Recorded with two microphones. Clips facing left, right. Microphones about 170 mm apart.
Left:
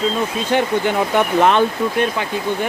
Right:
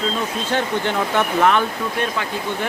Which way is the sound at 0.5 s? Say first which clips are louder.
Left 4 dB; 15° left (ahead or behind).